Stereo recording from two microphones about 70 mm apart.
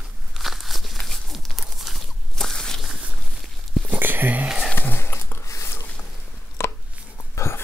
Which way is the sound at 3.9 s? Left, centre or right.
Right.